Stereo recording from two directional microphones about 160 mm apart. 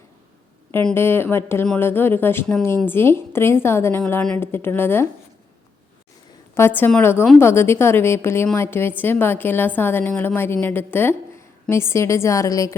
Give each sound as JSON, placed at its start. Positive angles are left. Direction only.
{"t": 0.7, "sound": "a woman's voice", "side_deg": 10}
{"t": 6.5, "sound": "a woman's voice", "side_deg": 15}